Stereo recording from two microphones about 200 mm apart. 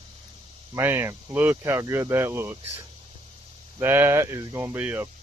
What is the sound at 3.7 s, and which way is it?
Speech, 10° right (ahead or behind).